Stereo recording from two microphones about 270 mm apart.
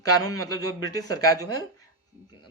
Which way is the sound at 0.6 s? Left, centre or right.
Left.